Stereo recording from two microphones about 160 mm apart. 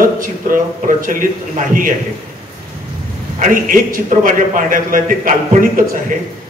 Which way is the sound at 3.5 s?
60° right (ahead or behind).